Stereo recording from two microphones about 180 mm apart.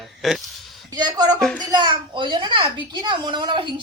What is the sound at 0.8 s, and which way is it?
Speech, 20° right (ahead or behind).